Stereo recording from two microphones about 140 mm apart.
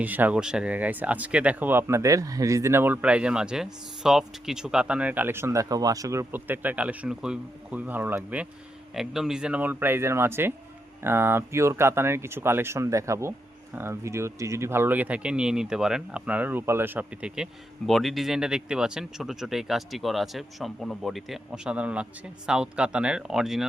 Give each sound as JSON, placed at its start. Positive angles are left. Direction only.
{"t": 0.0, "sound": "speech", "side_deg": -10}